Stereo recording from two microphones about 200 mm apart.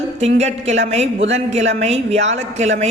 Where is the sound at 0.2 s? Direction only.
35° right (ahead or behind).